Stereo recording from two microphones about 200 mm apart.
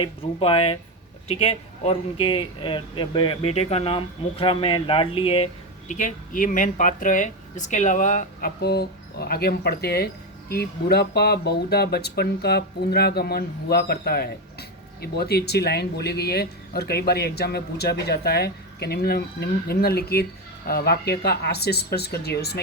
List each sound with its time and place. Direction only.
0.0 s speech: 25° left (ahead or behind)
5.9 s speech: 40° left (ahead or behind)